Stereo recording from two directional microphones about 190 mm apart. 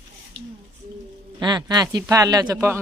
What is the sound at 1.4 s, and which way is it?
A man's voice, 20° right (ahead or behind).